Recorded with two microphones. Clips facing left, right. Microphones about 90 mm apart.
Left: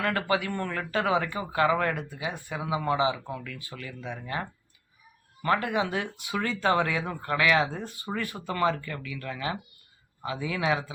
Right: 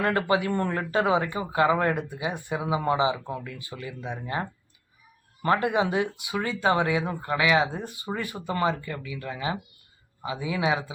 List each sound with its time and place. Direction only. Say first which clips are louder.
0.0 s speech: right 3 dB; 30° right (ahead or behind)
6.1 s speech: right 1 dB; 15° right (ahead or behind)